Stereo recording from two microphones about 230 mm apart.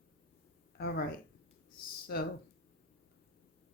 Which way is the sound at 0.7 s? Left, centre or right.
Left.